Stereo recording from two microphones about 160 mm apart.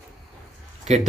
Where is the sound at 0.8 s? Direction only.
50° right (ahead or behind).